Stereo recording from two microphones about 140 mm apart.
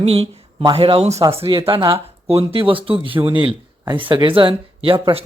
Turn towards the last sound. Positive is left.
turn(degrees=-40)  # may be behind; listen again after turning